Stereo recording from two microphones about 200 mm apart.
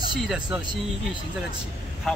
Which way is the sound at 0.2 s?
5° right (ahead or behind).